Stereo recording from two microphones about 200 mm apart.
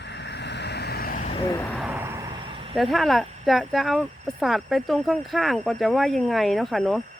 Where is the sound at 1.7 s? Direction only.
5° right (ahead or behind); by 2.7 s 25° right (ahead or behind).